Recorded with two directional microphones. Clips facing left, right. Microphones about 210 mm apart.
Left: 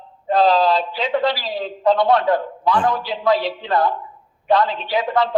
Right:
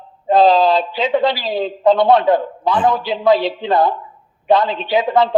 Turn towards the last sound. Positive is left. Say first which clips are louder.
# right 4 dB
turn(degrees=-25)  # may be behind; listen again after turning